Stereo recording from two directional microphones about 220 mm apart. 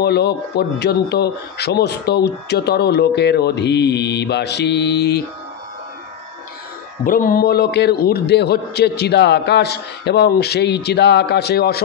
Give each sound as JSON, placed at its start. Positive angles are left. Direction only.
{"t": 0.0, "sound": "a man's voice", "side_deg": 50}
{"t": 7.1, "sound": "a man's voice", "side_deg": 40}